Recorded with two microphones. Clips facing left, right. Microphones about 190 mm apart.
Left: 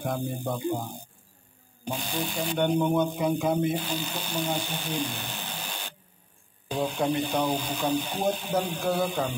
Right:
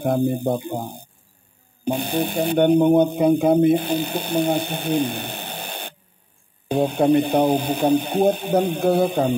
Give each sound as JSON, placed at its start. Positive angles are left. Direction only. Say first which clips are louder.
{"t": 0.0, "sound": "speech", "louder": "right 10 dB", "side_deg": -60}